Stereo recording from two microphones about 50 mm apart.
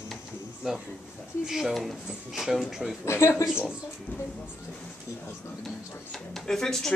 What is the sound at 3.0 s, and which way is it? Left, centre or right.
Speech, left.